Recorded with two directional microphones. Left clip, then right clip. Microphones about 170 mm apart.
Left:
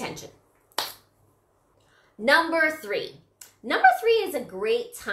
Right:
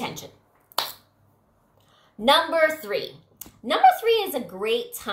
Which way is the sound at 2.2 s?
10° right (ahead or behind).